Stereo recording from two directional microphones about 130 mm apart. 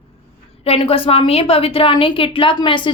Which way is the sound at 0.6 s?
50° left (ahead or behind).